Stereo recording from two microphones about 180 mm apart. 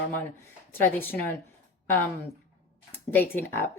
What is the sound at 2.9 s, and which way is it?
Speech, 10° left (ahead or behind).